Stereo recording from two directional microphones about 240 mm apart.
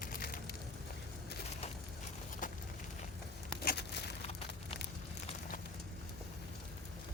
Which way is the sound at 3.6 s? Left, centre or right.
Left.